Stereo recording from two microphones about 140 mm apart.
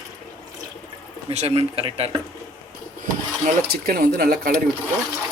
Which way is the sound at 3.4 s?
90° right.